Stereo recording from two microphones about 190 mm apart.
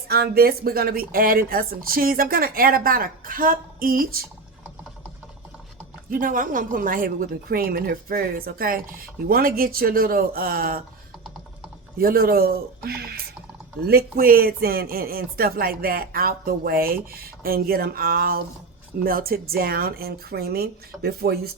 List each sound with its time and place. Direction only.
0.1 s a woman's voice: 55° right (ahead or behind)
6.1 s a woman's voice: 45° right (ahead or behind)
11.9 s a woman's voice: 50° right (ahead or behind)